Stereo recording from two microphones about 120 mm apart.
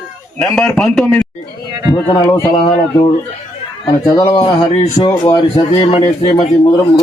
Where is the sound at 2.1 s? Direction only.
35° left (ahead or behind).